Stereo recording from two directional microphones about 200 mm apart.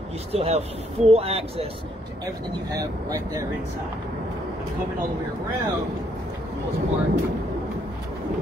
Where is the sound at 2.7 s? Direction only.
20° right (ahead or behind).